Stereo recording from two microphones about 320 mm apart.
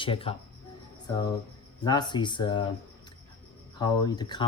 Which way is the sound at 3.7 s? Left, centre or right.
Centre.